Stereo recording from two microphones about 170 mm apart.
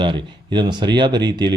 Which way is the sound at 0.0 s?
25° right (ahead or behind).